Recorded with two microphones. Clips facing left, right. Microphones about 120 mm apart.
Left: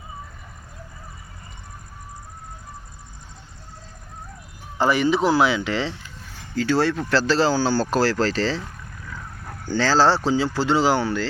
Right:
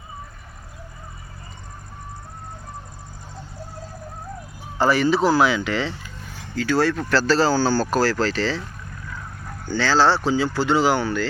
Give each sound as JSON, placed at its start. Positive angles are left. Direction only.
{"t": 4.8, "sound": "speech", "side_deg": 20}
{"t": 9.7, "sound": "speech", "side_deg": 35}